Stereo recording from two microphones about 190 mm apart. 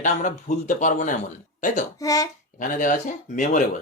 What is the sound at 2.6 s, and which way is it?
Speech, 45° left (ahead or behind).